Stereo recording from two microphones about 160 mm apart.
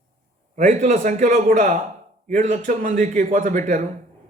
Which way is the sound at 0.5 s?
50° right (ahead or behind).